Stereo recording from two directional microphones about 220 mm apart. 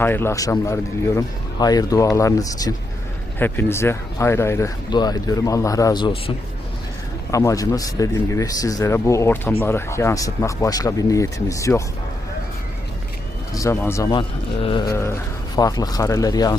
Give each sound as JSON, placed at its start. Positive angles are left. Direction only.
{"t": 0.0, "sound": "speech", "side_deg": 10}
{"t": 13.5, "sound": "speech", "side_deg": 15}